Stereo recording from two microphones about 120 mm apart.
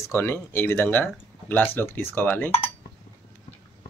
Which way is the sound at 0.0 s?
20° left (ahead or behind).